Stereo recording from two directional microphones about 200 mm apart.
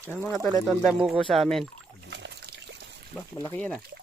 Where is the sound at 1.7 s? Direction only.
60° right (ahead or behind).